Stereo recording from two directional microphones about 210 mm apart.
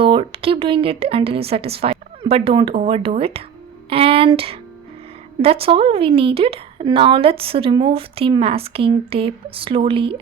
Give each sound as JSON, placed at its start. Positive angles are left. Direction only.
{"t": 0.0, "sound": "a woman's voice", "side_deg": -25}